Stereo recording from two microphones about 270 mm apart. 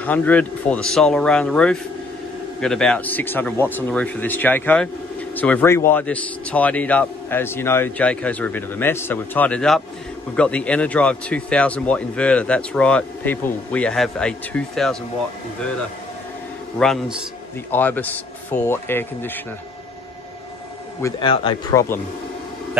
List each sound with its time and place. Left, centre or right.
0.0 s speech: centre
16.7 s speech: centre
21.0 s speech: centre